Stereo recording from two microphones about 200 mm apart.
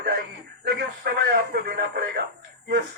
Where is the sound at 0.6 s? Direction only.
55° right (ahead or behind).